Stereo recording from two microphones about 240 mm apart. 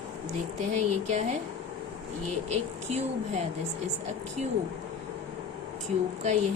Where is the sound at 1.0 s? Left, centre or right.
Right.